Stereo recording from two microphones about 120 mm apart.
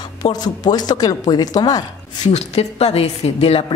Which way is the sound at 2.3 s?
60° left (ahead or behind).